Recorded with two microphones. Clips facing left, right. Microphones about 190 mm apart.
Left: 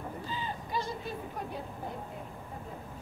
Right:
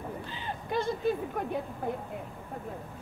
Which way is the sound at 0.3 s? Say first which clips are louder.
Right 2 dB; 60° right (ahead or behind).